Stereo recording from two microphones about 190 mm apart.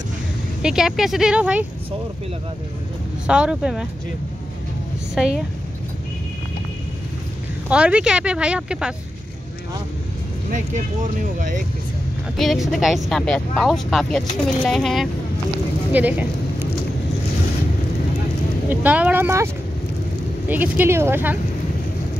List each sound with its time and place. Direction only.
0.6 s speech: 5° right (ahead or behind)
3.3 s speech: 5° right (ahead or behind)
5.2 s speech: centre (ahead or behind)
7.7 s speech: 5° right (ahead or behind)
11.3 s speech: 45° right (ahead or behind)
12.4 s speech: centre (ahead or behind)
18.7 s speech: 10° right (ahead or behind)